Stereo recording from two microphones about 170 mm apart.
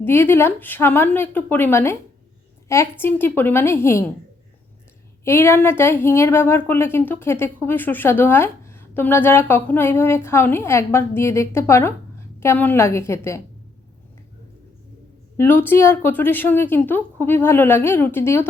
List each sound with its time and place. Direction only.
0.0 s a woman's voice: 15° left (ahead or behind)
3.0 s a woman's voice: 10° left (ahead or behind)
5.2 s a woman's voice: 15° left (ahead or behind)
15.4 s a woman's voice: 10° left (ahead or behind)